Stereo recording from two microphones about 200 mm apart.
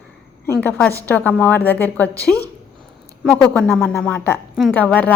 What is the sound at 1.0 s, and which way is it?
A woman's voice, 10° left (ahead or behind).